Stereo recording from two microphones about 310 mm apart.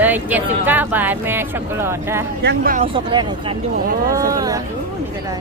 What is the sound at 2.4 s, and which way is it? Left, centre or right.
Speech, right.